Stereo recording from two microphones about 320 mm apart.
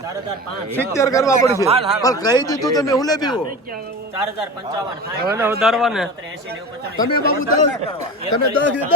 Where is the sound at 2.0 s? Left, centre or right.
Centre.